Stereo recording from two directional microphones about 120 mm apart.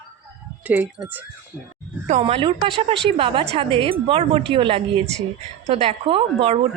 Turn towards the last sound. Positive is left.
turn(degrees=-50)  # may be behind; listen again after turning